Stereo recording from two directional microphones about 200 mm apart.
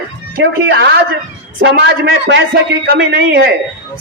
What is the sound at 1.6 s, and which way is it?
A man's voice, 65° right (ahead or behind).